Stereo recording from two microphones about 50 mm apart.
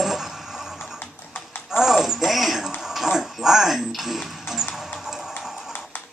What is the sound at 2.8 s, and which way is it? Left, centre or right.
Music, centre.